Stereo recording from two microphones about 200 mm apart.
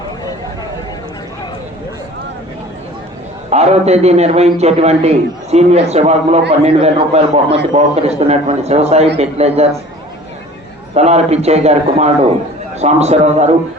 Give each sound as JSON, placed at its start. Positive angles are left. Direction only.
{"t": 3.5, "sound": "a man's voice", "side_deg": -30}
{"t": 10.9, "sound": "a man's voice", "side_deg": -35}